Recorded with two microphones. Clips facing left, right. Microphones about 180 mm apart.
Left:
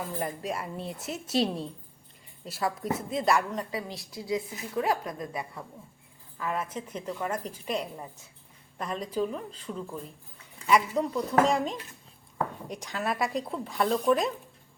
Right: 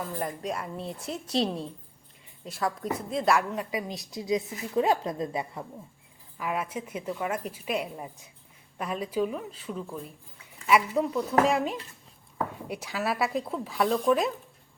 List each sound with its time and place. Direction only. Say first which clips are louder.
0.2 s speech: even; 5° left (ahead or behind); by 5.6 s 25° right (ahead or behind)
6.3 s a woman's voice: right 1 dB; 10° right (ahead or behind)